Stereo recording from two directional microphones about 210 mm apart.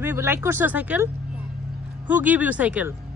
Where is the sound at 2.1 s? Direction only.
5° right (ahead or behind).